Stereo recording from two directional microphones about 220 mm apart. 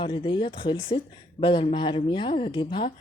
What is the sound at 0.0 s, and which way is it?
Speech, 20° left (ahead or behind).